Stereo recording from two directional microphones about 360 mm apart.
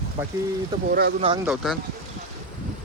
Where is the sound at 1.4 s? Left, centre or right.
Centre.